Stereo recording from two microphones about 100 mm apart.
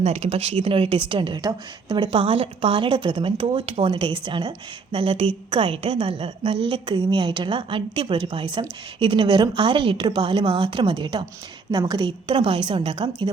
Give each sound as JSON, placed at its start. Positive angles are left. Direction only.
{"t": 0.0, "sound": "a woman's voice", "side_deg": -90}
{"t": 2.7, "sound": "a woman's voice", "side_deg": -55}
{"t": 3.9, "sound": "a woman's voice", "side_deg": -55}
{"t": 11.7, "sound": "a woman's voice", "side_deg": -45}